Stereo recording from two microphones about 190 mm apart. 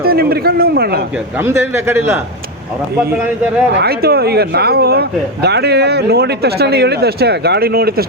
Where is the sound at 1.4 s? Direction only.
15° right (ahead or behind).